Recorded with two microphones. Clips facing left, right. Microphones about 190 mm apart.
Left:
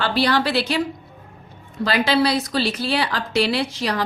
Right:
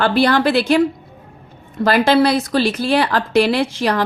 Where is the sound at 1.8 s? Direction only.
50° right (ahead or behind).